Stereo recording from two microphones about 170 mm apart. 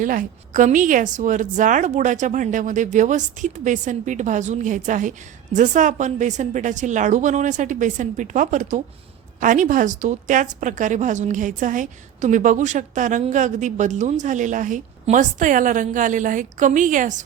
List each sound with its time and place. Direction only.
0.0 s a woman's voice: 55° right (ahead or behind)